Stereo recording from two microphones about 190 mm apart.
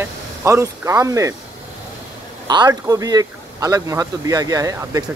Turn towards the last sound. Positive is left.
turn(degrees=-20)  # may be behind; listen again after turning